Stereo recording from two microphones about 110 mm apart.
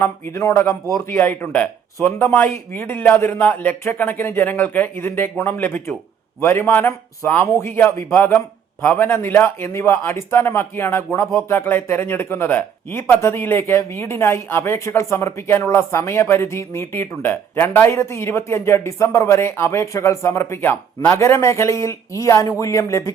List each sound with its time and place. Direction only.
0.0 s speech: 20° left (ahead or behind)